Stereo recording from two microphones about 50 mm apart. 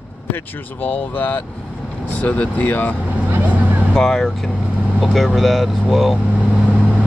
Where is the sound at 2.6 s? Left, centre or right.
Left.